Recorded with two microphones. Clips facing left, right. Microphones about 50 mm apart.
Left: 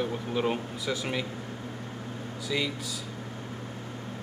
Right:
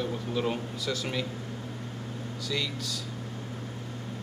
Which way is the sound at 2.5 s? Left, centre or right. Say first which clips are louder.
Left 2 dB; centre.